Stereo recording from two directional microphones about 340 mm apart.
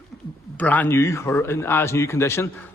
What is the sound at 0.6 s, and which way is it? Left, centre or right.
A man's voice, centre.